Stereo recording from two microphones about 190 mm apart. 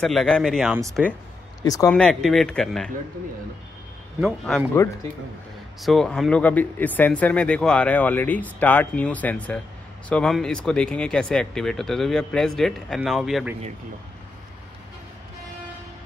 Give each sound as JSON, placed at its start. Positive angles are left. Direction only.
{"t": 0.0, "sound": "speech", "side_deg": 0}
{"t": 1.6, "sound": "speech", "side_deg": 20}
{"t": 1.9, "sound": "speech", "side_deg": 5}
{"t": 4.2, "sound": "speech", "side_deg": 0}
{"t": 5.8, "sound": "speech", "side_deg": 0}